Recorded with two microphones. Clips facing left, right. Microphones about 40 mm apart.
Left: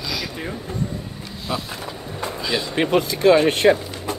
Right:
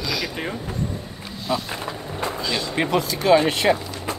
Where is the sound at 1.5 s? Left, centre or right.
Centre.